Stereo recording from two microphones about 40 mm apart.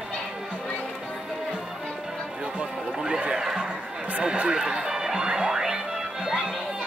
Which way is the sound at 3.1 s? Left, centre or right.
Right.